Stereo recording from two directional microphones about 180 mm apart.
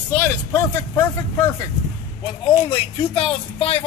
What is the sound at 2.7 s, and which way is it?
Speech, 30° left (ahead or behind).